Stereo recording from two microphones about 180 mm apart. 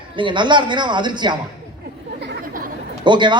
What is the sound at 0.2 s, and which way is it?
A man's voice, 25° right (ahead or behind).